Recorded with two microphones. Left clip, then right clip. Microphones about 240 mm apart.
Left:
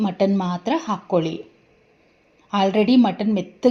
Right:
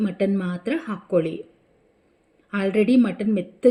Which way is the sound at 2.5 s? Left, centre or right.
Centre.